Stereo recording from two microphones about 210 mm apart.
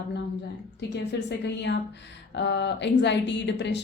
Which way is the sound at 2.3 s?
55° left (ahead or behind).